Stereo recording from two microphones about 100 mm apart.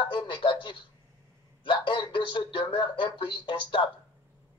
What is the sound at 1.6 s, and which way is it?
A man's voice, 55° left (ahead or behind).